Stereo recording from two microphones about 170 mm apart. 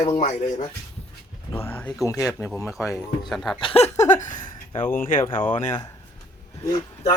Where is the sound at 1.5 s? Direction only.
15° left (ahead or behind).